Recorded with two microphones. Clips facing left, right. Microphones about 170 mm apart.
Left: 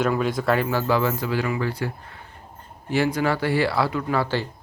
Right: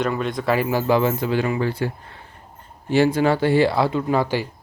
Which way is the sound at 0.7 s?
15° right (ahead or behind).